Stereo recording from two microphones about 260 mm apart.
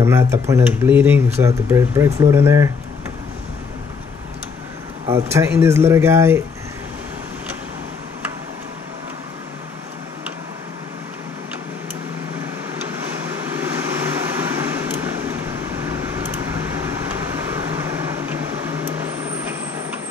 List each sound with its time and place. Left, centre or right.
0.0 s speech: centre
5.1 s speech: centre
13.6 s vehicle: centre